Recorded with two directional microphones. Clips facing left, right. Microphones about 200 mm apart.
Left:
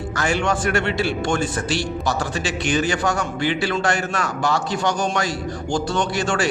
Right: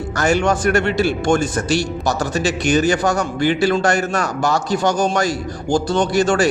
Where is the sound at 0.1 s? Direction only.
45° right (ahead or behind).